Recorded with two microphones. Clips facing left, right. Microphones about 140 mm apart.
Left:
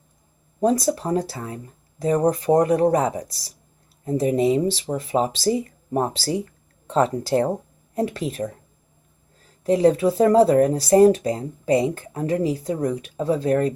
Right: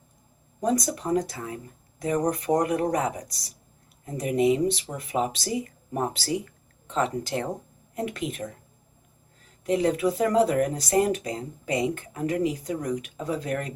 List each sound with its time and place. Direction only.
0.6 s speech: 30° left (ahead or behind)